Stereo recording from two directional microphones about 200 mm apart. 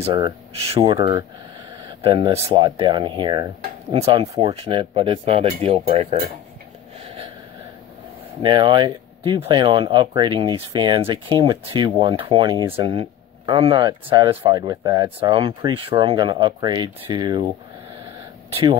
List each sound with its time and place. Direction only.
0.7 s speech: 25° right (ahead or behind)
8.4 s speech: 25° right (ahead or behind)